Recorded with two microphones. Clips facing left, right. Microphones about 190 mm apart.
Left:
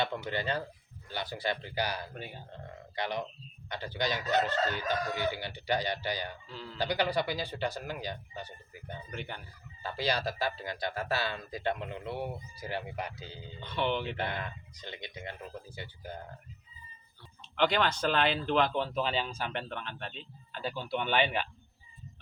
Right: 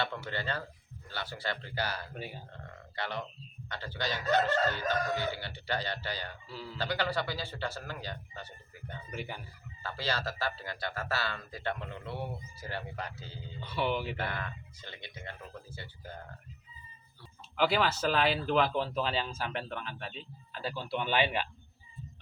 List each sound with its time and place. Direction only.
0.0 s a man's voice: 15° left (ahead or behind)
2.1 s speech: 5° right (ahead or behind)
2.5 s a man's voice: 15° left (ahead or behind)
6.5 s speech: 5° right (ahead or behind)
6.7 s a man's voice: 15° left (ahead or behind)
9.0 s speech: 5° right (ahead or behind)
9.8 s a man's voice: 15° left (ahead or behind)
13.6 s speech: 5° right (ahead or behind)
14.2 s a man's voice: 20° left (ahead or behind)
17.6 s speech: 5° right (ahead or behind)